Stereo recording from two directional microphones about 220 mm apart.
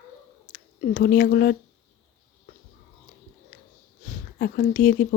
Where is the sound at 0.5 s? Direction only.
40° left (ahead or behind).